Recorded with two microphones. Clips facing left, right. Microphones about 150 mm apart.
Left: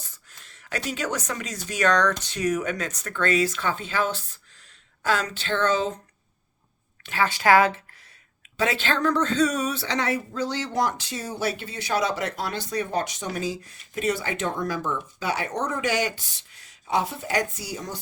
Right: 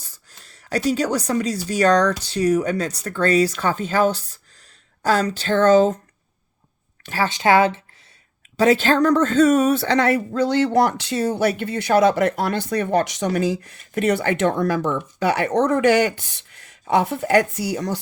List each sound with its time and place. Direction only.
0.0 s a sound: 35° right (ahead or behind)
0.9 s speech: 35° right (ahead or behind)
7.0 s a woman's voice: 40° right (ahead or behind)
7.3 s speech: 25° right (ahead or behind)
8.5 s speech: 40° right (ahead or behind); by 18.0 s 75° right (ahead or behind)